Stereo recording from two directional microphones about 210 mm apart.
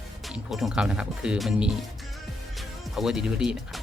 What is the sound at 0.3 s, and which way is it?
Speech, centre (ahead or behind).